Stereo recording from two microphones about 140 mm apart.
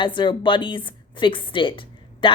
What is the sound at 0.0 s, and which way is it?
A woman's voice, 35° left (ahead or behind).